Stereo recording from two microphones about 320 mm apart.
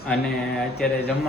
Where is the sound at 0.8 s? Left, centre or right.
Centre.